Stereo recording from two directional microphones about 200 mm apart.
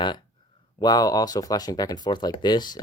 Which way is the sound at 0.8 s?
20° left (ahead or behind).